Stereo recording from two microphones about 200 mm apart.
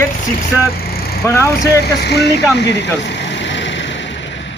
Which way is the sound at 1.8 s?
55° left (ahead or behind).